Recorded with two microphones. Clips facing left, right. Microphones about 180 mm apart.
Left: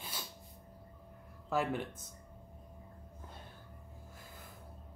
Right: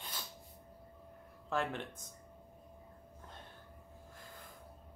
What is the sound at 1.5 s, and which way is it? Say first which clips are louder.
Speech: left 3 dB; 5° left (ahead or behind).